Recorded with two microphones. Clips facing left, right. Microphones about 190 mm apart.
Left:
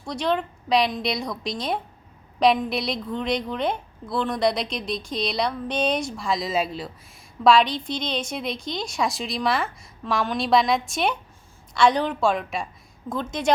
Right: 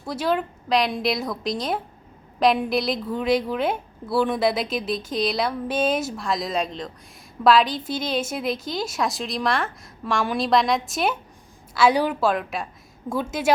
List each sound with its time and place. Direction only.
0.0 s a woman's voice: 5° right (ahead or behind)